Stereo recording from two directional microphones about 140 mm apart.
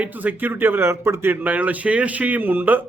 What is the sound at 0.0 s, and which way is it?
A man's voice, 10° right (ahead or behind).